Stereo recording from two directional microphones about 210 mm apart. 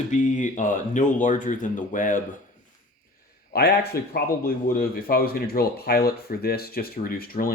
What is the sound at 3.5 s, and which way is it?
Speech, 50° left (ahead or behind).